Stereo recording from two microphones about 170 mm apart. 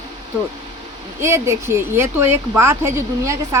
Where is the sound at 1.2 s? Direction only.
15° right (ahead or behind).